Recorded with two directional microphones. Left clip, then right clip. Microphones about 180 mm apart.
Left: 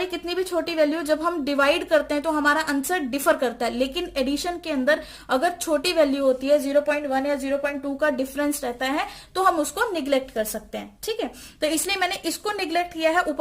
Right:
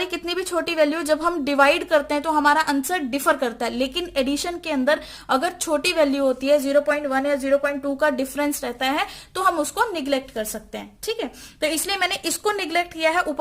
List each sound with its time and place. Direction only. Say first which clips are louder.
0.0 s a woman's voice: right 1 dB; 30° right (ahead or behind)